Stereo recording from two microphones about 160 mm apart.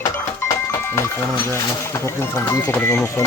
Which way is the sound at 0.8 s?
15° left (ahead or behind).